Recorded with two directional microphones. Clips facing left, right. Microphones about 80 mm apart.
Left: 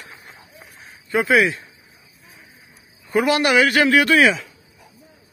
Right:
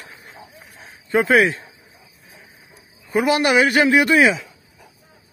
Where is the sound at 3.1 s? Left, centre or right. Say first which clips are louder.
Even; right.